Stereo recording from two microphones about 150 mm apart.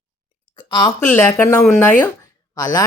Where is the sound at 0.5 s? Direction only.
35° left (ahead or behind).